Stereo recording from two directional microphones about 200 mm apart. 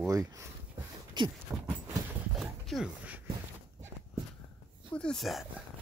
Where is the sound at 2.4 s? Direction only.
Centre (ahead or behind).